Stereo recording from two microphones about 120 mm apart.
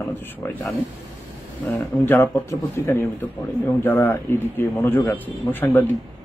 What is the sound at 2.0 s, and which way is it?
A man's voice, 20° left (ahead or behind).